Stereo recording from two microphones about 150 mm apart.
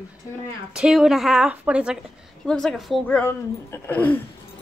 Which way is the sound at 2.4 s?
5° left (ahead or behind).